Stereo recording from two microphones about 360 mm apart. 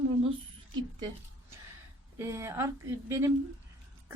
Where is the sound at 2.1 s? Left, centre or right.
Centre.